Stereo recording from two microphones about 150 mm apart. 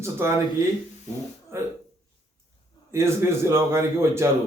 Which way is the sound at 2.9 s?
15° right (ahead or behind).